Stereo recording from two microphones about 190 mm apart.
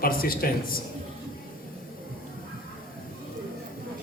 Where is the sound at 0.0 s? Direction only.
50° left (ahead or behind).